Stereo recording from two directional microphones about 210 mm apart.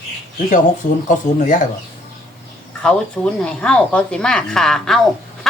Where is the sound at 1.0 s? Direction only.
40° left (ahead or behind).